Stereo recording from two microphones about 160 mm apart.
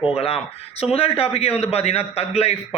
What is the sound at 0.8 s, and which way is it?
A man's voice, 40° left (ahead or behind).